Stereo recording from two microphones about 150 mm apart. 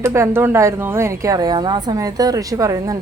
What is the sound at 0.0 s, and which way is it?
A woman's voice, 20° right (ahead or behind).